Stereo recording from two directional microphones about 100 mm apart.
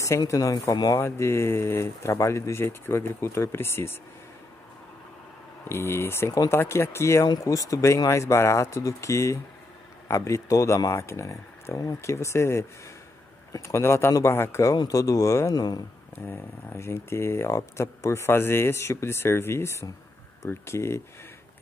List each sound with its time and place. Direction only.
0.3 s speech: 35° left (ahead or behind)
0.9 s speech: 25° left (ahead or behind)
5.7 s speech: 25° left (ahead or behind); by 15.8 s 40° left (ahead or behind)
16.3 s speech: 25° left (ahead or behind)